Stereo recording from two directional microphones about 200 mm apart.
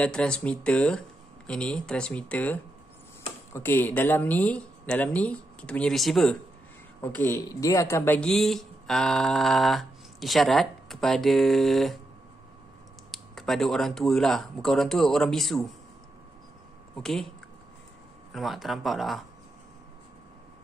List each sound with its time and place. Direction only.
0.0 s speech: 5° left (ahead or behind)
13.1 s speech: centre (ahead or behind)
16.9 s speech: centre (ahead or behind)
18.3 s speech: centre (ahead or behind)